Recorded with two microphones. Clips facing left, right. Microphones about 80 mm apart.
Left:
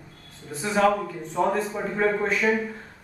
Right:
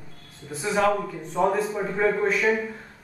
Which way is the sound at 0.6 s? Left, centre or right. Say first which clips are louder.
Left 1 dB; centre.